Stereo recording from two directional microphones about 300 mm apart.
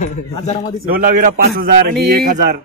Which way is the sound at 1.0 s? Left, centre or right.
Right.